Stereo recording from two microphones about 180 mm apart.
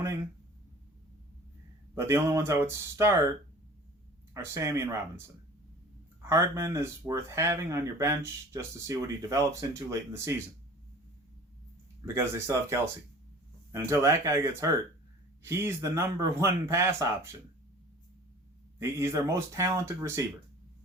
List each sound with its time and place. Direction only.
2.0 s speech: 15° right (ahead or behind)
4.4 s speech: 15° right (ahead or behind)
6.2 s speech: 15° right (ahead or behind)
12.0 s speech: 15° right (ahead or behind)
13.7 s speech: 15° right (ahead or behind)
18.8 s speech: 15° right (ahead or behind)